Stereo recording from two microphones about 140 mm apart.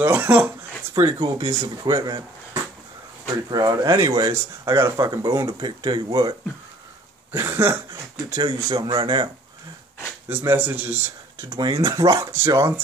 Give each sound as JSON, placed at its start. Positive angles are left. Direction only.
{"t": 0.0, "sound": "speech", "side_deg": -15}
{"t": 0.9, "sound": "speech", "side_deg": -30}
{"t": 7.3, "sound": "speech", "side_deg": -20}
{"t": 8.6, "sound": "speech", "side_deg": -35}
{"t": 10.2, "sound": "speech", "side_deg": -15}
{"t": 11.4, "sound": "speech", "side_deg": -30}